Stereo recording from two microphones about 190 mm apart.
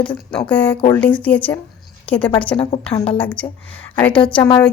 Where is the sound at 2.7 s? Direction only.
25° left (ahead or behind).